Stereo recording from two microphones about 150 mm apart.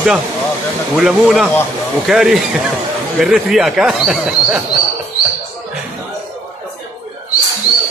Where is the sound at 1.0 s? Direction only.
Centre (ahead or behind).